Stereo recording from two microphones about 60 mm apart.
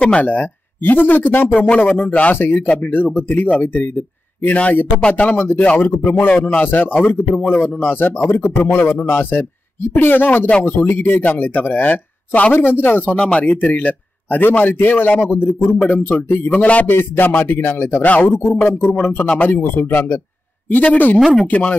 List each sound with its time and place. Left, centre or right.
0.0 s speech: centre
0.3 s a man's voice: left
1.7 s a man's voice: centre
2.3 s a man's voice: left
13.1 s a man's voice: centre
16.8 s a man's voice: left
19.2 s a man's voice: left